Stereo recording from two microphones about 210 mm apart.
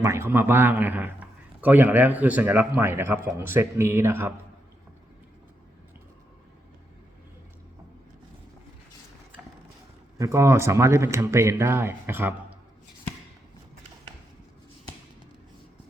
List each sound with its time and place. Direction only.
0.0 s a man's voice: 10° right (ahead or behind)
10.2 s a man's voice: 15° right (ahead or behind)